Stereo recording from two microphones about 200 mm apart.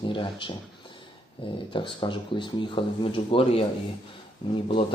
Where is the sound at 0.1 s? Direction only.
25° left (ahead or behind).